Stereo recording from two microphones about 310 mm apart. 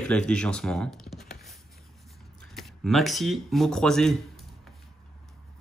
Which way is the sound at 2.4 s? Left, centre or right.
Centre.